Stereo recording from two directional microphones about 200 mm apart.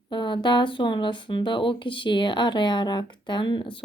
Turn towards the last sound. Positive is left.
turn(degrees=25)  # may be behind; listen again after turning